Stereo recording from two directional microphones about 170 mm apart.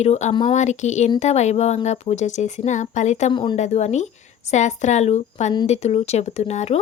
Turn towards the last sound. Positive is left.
turn(degrees=40)  # may be behind; listen again after turning